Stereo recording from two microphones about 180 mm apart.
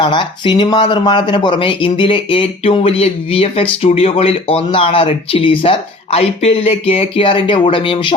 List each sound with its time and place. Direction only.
0.0 s speech: 25° left (ahead or behind)